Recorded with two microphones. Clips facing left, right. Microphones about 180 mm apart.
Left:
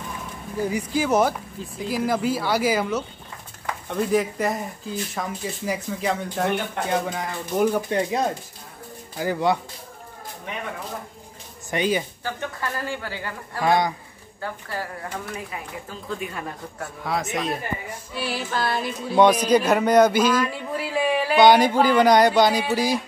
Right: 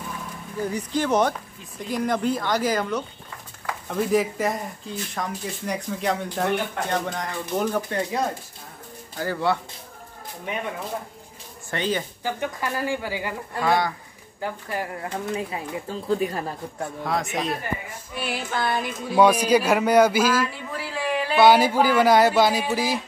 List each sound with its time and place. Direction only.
0.6 s speech: 10° left (ahead or behind)
9.1 s speech: 15° left (ahead or behind)
11.7 s speech: 10° left (ahead or behind)
12.2 s speech: 15° right (ahead or behind)
13.6 s a man's voice: 20° left (ahead or behind)
14.4 s speech: 15° right (ahead or behind)
16.1 s speech: 35° right (ahead or behind)
17.0 s speech: centre (ahead or behind)
18.2 s speech: 20° right (ahead or behind)
20.7 s speech: 15° left (ahead or behind)
21.3 s speech: 5° right (ahead or behind)